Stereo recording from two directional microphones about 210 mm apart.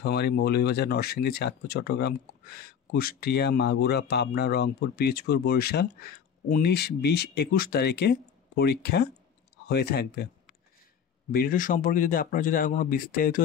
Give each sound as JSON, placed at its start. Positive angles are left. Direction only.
{"t": 0.0, "sound": "speech", "side_deg": 50}
{"t": 11.3, "sound": "speech", "side_deg": 40}